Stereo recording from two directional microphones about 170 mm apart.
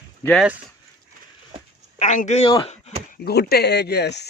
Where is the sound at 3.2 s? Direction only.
70° left (ahead or behind).